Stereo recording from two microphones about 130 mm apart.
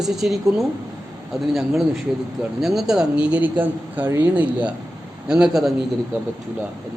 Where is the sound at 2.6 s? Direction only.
Centre (ahead or behind).